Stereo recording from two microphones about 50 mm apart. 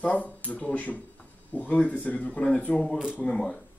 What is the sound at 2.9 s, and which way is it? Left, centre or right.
Speech, centre.